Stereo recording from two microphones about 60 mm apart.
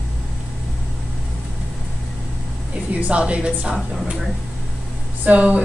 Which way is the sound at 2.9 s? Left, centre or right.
Centre.